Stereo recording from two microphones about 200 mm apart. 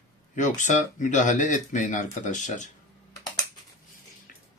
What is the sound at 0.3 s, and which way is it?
Speech, 40° left (ahead or behind).